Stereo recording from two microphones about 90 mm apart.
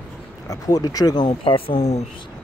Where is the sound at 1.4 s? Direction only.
75° left (ahead or behind).